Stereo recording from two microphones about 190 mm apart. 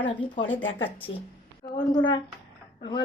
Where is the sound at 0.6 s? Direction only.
90° left.